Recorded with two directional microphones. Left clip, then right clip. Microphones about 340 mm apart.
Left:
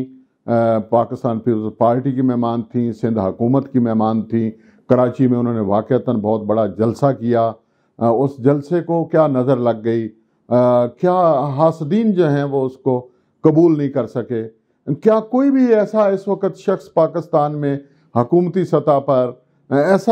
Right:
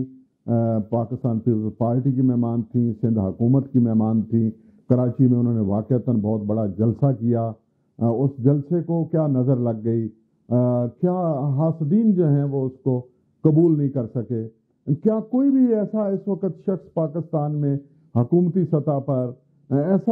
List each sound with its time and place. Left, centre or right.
0.5 s speech: centre
12.4 s a man's voice: centre